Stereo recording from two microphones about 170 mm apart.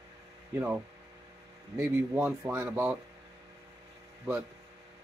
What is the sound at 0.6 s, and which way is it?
Speech, 10° right (ahead or behind).